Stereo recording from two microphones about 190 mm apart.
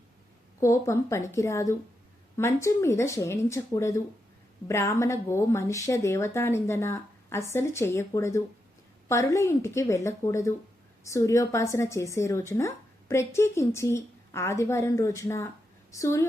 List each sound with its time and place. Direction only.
0.6 s a woman's voice: 15° left (ahead or behind)